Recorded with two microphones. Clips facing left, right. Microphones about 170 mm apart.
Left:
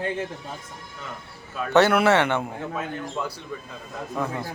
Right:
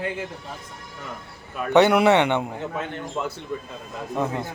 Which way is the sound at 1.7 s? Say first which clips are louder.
Right 2 dB; 15° right (ahead or behind).